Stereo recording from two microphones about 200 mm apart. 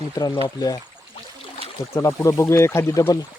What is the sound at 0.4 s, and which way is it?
Speech, 20° left (ahead or behind).